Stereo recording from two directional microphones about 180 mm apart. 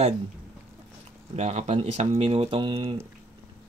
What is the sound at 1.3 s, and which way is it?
Speech, 35° right (ahead or behind).